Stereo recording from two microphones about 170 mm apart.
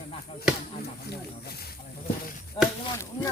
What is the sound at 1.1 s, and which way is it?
Speech, 65° left (ahead or behind).